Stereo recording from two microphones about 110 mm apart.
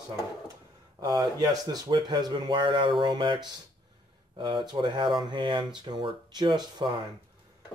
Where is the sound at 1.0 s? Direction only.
40° right (ahead or behind).